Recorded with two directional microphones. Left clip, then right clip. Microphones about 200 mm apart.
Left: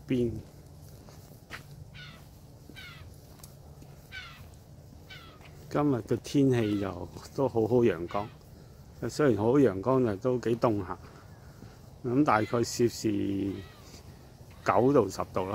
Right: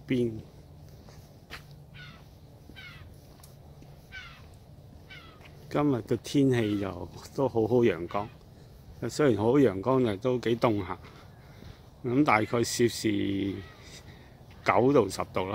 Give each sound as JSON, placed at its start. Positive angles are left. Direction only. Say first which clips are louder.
{"t": 1.5, "sound": "a sound", "louder": "left 1 dB", "side_deg": 30}
{"t": 2.7, "sound": "crow", "louder": "even", "side_deg": 35}
{"t": 4.1, "sound": "cat", "louder": "left 1 dB", "side_deg": 30}
{"t": 5.7, "sound": "speech", "louder": "right 1 dB", "side_deg": -10}
{"t": 12.0, "sound": "speech", "louder": "right 1 dB", "side_deg": -5}
{"t": 14.6, "sound": "speech", "louder": "right 1 dB", "side_deg": -5}